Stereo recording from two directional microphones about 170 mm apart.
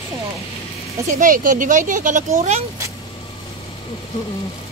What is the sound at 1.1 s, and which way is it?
Speech, 50° right (ahead or behind).